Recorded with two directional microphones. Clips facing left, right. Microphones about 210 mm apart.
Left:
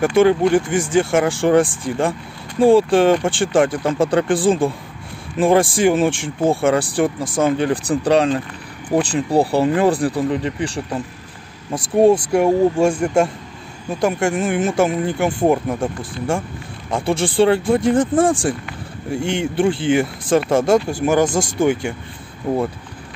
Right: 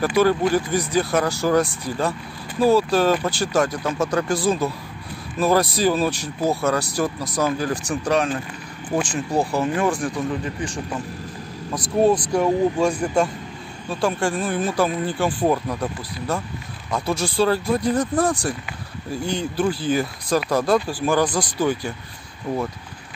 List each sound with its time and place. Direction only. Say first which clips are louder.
0.2 s speech: left 5 dB; 25° left (ahead or behind)
11.7 s speech: left 5 dB; 25° left (ahead or behind)
19.0 s speech: left 4 dB; 25° left (ahead or behind)